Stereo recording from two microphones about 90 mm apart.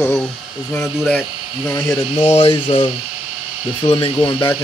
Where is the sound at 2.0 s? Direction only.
70° left (ahead or behind).